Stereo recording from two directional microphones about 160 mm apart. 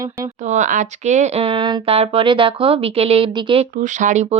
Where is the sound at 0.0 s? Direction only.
20° right (ahead or behind).